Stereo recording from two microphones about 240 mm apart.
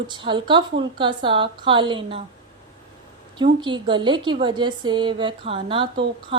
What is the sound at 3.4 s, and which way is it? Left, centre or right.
A woman's voice, centre.